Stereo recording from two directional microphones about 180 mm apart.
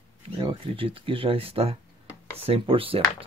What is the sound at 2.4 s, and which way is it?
Sanding, 30° right (ahead or behind).